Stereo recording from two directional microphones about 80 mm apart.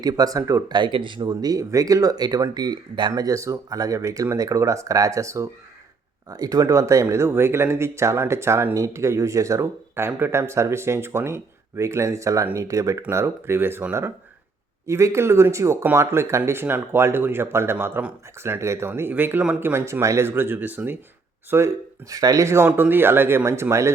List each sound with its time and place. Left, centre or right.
0.0 s speech: right
0.7 s speech: right
2.6 s speech: right
3.2 s speech: right
6.3 s speech: right
14.8 s speech: right; by 19.5 s centre
19.5 s speech: right
22.1 s speech: right